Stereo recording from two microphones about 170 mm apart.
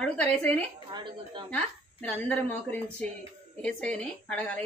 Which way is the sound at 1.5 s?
5° left (ahead or behind).